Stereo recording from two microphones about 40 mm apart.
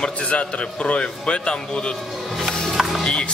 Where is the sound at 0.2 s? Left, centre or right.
Left.